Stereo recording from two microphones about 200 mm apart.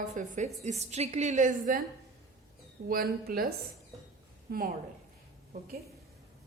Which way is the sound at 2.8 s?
50° right (ahead or behind).